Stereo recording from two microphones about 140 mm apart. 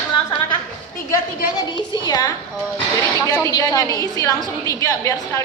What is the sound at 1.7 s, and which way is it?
A woman's voice, 30° left (ahead or behind).